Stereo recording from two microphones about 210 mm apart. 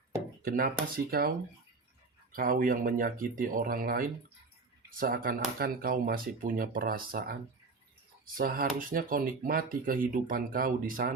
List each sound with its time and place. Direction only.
0.4 s speech: 45° right (ahead or behind)
2.3 s speech: 40° right (ahead or behind)
8.4 s speech: 40° right (ahead or behind)